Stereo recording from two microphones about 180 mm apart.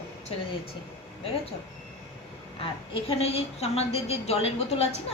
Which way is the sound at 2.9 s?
30° left (ahead or behind).